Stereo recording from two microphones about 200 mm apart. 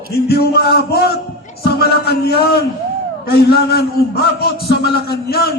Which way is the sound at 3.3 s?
50° left (ahead or behind).